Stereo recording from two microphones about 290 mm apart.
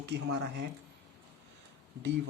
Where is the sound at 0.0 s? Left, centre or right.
Right.